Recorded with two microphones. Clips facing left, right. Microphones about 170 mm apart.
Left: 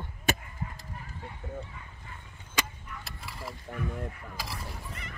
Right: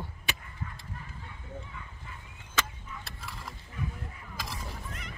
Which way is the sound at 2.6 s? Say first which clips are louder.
Even; 15° left (ahead or behind).